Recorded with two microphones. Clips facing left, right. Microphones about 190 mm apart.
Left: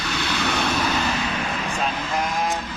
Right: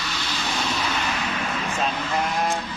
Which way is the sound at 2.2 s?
Centre (ahead or behind).